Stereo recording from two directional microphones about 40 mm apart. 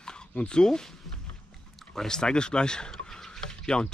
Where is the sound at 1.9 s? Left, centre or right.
Centre.